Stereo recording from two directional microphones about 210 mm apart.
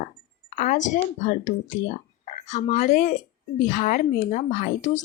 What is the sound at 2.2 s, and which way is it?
A woman's voice, 35° left (ahead or behind).